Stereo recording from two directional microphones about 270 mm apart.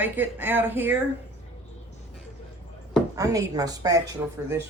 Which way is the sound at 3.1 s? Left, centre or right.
Centre.